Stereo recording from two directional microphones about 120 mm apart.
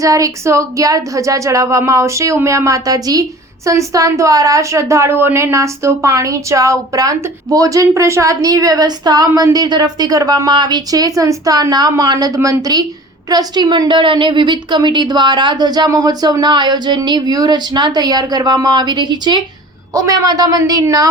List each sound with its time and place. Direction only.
0.0 s a woman's voice: 25° right (ahead or behind)